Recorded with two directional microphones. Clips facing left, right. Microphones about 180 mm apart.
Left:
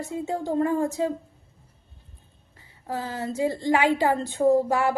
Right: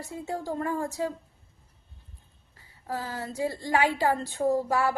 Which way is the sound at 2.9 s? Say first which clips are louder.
Left 4 dB; 20° left (ahead or behind).